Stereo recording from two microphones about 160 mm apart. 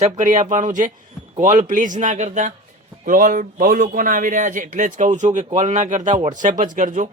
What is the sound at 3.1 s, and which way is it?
A man's voice, 60° right (ahead or behind).